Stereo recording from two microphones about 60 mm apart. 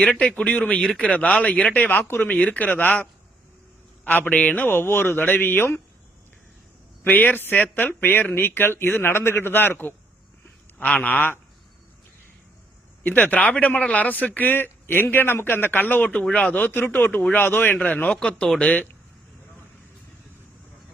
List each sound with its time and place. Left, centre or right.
0.2 s speech: centre
4.7 s speech: left
7.0 s speech: left
13.0 s speech: left
16.6 s speech: left
17.2 s speech: left
17.4 s speech: left
17.7 s speech: left
18.6 s speech: left